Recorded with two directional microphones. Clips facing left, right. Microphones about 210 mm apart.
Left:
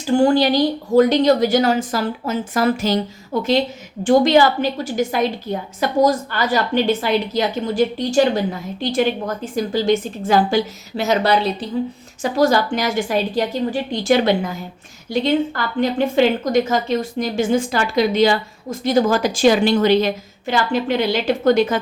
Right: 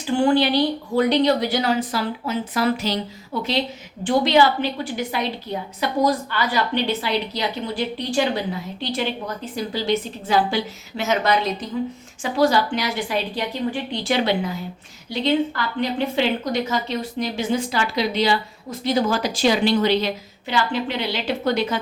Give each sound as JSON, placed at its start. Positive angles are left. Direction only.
{"t": 0.2, "sound": "speech", "side_deg": 40}
{"t": 12.2, "sound": "speech", "side_deg": 45}